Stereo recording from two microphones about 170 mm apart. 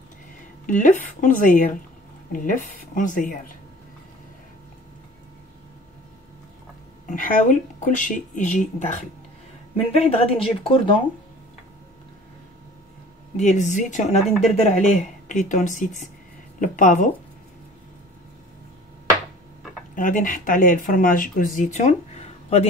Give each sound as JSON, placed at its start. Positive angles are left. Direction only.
{"t": 0.7, "sound": "speech", "side_deg": 50}
{"t": 7.1, "sound": "speech", "side_deg": 50}
{"t": 13.4, "sound": "speech", "side_deg": 45}
{"t": 20.0, "sound": "speech", "side_deg": 50}